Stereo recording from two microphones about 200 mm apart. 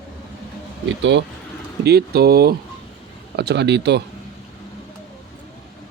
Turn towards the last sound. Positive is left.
turn(degrees=-60)  # may be behind; listen again after turning